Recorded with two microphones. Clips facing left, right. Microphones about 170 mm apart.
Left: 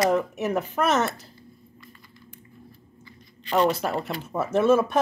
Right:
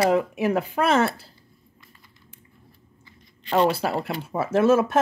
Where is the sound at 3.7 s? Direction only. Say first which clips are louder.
Right 1 dB; 10° right (ahead or behind).